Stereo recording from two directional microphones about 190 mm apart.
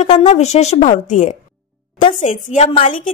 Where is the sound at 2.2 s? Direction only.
40° left (ahead or behind).